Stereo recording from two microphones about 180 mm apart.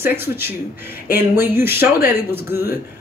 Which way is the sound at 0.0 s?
10° right (ahead or behind).